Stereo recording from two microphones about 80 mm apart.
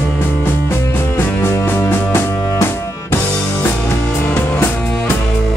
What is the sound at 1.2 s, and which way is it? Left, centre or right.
Music, left.